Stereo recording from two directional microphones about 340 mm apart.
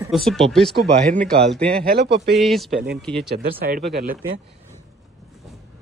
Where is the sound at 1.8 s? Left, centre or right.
Right.